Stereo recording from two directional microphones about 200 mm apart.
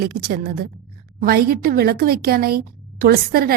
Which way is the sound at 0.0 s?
50° right (ahead or behind).